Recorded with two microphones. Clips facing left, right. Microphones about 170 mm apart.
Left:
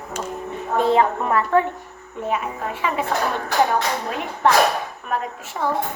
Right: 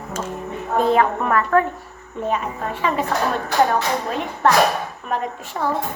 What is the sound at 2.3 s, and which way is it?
Speech, 10° left (ahead or behind).